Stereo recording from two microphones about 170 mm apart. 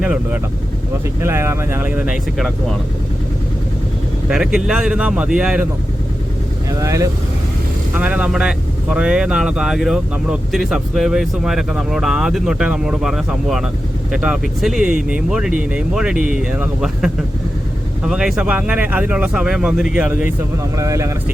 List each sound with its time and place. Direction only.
0.0 s speech: 5° right (ahead or behind)
4.3 s speech: 5° right (ahead or behind)
6.7 s speech: 20° right (ahead or behind)
7.9 s speech: 5° right (ahead or behind)
20.7 s speech: 20° right (ahead or behind)